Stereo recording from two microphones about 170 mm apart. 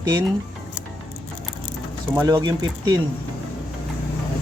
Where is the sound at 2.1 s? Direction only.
20° right (ahead or behind).